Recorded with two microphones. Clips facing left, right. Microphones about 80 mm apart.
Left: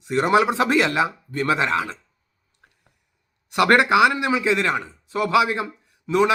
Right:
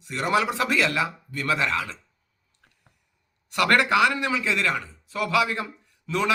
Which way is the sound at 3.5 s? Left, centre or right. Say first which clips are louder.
Left 4 dB; left.